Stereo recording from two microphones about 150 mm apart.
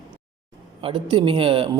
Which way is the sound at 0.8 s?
35° right (ahead or behind).